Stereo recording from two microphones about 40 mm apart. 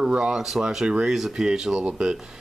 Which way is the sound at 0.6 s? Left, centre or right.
Right.